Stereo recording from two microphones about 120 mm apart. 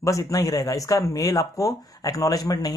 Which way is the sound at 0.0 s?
25° left (ahead or behind).